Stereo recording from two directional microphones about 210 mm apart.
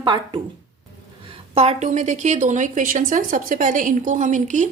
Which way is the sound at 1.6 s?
30° right (ahead or behind).